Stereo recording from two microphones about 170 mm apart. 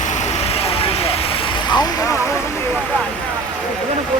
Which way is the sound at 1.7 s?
25° left (ahead or behind).